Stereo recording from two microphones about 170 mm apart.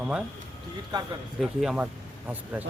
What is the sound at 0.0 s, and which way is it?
Speech, 5° right (ahead or behind).